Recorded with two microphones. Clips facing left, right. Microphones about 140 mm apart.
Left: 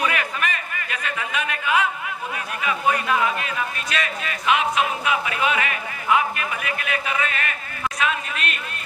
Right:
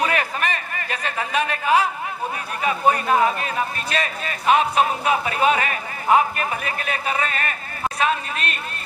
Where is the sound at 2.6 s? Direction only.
35° right (ahead or behind).